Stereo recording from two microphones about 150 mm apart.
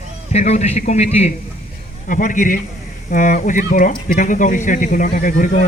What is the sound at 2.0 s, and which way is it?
Speech, 60° left (ahead or behind).